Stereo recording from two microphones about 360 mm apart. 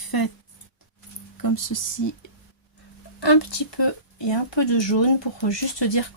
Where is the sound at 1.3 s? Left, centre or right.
Left.